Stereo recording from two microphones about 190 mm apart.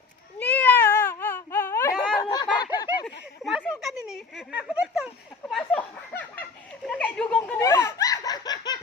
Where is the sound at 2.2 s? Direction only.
20° left (ahead or behind).